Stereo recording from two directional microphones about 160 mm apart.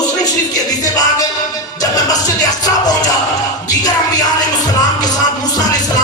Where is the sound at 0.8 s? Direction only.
20° left (ahead or behind).